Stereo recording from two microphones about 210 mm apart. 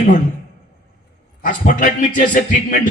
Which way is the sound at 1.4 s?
40° left (ahead or behind).